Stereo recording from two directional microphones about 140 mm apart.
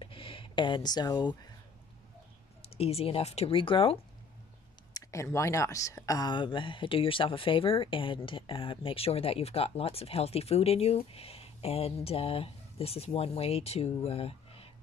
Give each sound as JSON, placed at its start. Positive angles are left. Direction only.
{"t": 0.0, "sound": "a sound", "side_deg": 40}
{"t": 2.6, "sound": "speech", "side_deg": 45}
{"t": 4.9, "sound": "speech", "side_deg": 20}